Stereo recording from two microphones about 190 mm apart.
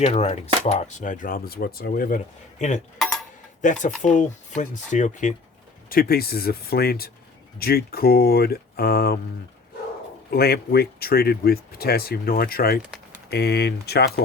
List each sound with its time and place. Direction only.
0.0 s speech: 35° left (ahead or behind)
5.9 s speech: 50° left (ahead or behind)
10.3 s speech: 55° left (ahead or behind)